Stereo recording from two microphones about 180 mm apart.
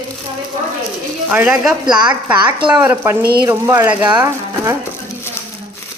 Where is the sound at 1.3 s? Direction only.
10° right (ahead or behind).